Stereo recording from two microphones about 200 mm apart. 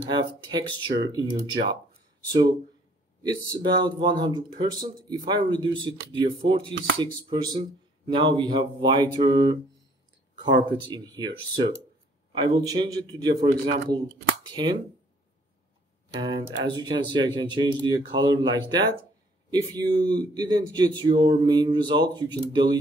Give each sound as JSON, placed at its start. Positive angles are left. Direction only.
{"t": 0.5, "sound": "speech", "side_deg": -20}
{"t": 3.2, "sound": "speech", "side_deg": -20}
{"t": 10.9, "sound": "speech", "side_deg": -20}
{"t": 16.2, "sound": "speech", "side_deg": -25}